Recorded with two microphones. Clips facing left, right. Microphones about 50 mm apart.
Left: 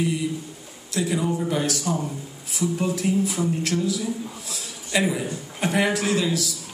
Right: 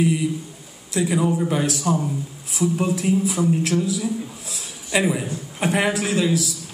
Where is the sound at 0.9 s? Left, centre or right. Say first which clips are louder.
Right 3 dB; centre.